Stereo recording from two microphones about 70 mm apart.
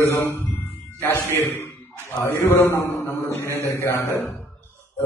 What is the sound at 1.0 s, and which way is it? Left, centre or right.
A man's voice, left.